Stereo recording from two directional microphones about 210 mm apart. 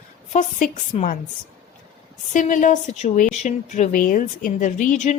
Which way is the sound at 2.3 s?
35° left (ahead or behind).